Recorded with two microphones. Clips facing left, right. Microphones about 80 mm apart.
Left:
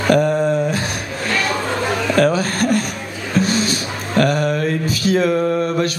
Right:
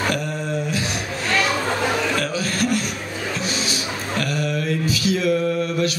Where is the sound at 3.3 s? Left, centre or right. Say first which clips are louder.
Left 12 dB; left.